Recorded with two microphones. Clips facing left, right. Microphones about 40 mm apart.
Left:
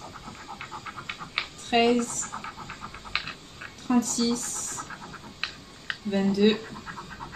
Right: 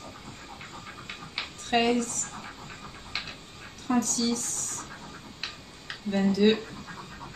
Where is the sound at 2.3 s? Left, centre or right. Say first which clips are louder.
Left 4 dB; left.